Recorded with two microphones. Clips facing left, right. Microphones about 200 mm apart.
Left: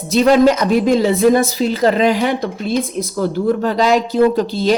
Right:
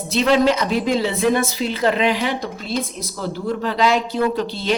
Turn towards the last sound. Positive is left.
turn(degrees=40)  # may be behind; listen again after turning